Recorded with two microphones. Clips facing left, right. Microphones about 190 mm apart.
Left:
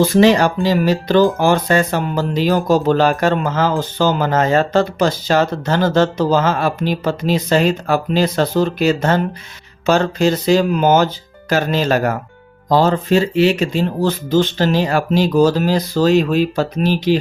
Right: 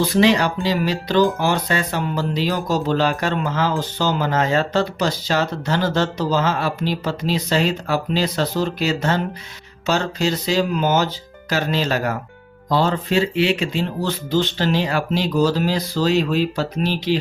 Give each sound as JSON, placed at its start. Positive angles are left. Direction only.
{"t": 0.0, "sound": "speech", "side_deg": 45}